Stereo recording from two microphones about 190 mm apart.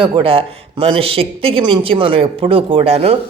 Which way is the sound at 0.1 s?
30° right (ahead or behind).